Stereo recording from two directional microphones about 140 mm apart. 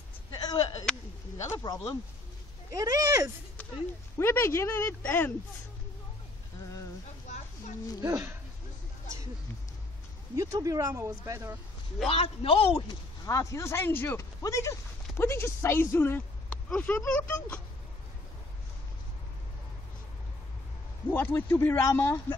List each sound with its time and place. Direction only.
0.3 s a sound: 25° left (ahead or behind)
1.4 s speech: 30° left (ahead or behind)
2.8 s speech: 25° right (ahead or behind)
4.2 s speech: 15° left (ahead or behind)
8.0 s speech: 20° right (ahead or behind)
10.3 s speech: 25° right (ahead or behind)
12.1 s a man's voice: 40° left (ahead or behind)
13.2 s speech: 25° left (ahead or behind)
21.1 s speech: 15° left (ahead or behind)